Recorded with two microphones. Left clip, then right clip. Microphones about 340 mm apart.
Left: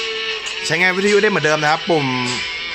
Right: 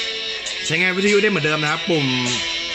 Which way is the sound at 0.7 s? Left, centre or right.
Centre.